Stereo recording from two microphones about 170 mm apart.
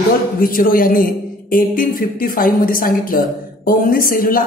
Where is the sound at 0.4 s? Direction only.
55° left (ahead or behind).